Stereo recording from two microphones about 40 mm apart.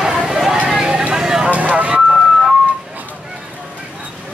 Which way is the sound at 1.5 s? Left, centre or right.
Right.